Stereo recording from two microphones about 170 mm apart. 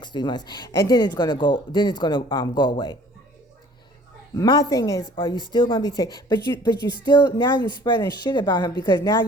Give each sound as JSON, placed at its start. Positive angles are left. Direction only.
{"t": 0.0, "sound": "speech", "side_deg": 25}
{"t": 4.4, "sound": "speech", "side_deg": 25}